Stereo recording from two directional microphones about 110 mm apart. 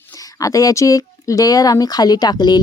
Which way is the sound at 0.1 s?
30° left (ahead or behind).